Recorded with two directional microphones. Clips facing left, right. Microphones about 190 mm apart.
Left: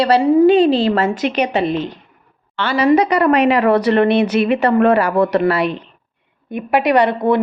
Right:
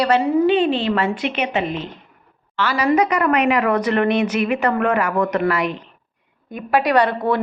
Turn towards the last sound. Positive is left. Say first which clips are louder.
# left 3 dB
turn(degrees=20)  # may be behind; listen again after turning